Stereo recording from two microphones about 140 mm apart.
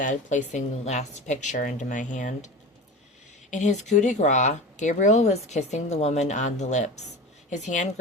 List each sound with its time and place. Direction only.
0.0 s speech: 65° left (ahead or behind)
3.5 s speech: 55° left (ahead or behind)